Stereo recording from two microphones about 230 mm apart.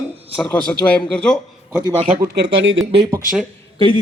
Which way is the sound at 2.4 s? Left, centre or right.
Right.